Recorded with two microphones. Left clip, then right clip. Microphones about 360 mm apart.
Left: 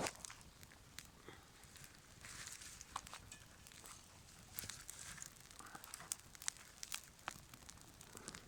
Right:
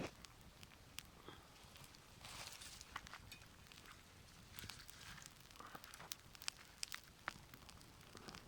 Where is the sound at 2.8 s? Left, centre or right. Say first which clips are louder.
Left 1 dB; centre.